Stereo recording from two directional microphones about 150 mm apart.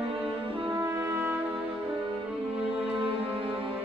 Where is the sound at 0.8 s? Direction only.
15° right (ahead or behind).